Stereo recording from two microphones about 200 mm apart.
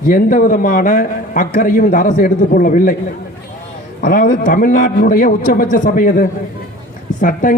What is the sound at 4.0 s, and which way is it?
A man's voice, 45° left (ahead or behind).